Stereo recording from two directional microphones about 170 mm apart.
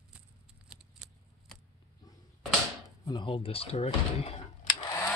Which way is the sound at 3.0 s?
30° left (ahead or behind).